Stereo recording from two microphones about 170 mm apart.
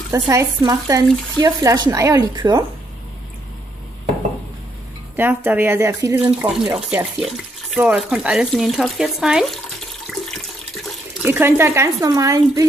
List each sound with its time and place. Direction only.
0.1 s speech: 15° right (ahead or behind)
5.1 s speech: 10° right (ahead or behind)
11.2 s speech: 15° right (ahead or behind)